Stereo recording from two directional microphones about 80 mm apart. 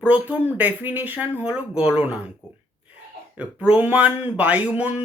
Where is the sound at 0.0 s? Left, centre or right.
Centre.